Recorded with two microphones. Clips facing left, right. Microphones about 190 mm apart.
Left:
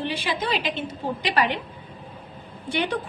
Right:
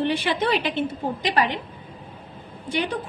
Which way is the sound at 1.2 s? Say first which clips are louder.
Right 1 dB; 35° right (ahead or behind).